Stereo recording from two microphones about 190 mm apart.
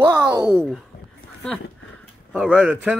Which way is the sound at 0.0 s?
20° right (ahead or behind).